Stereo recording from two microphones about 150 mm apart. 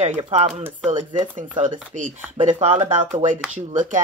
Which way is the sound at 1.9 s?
50° right (ahead or behind).